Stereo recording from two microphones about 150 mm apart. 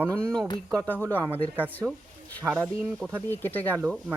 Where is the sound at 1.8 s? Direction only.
10° right (ahead or behind).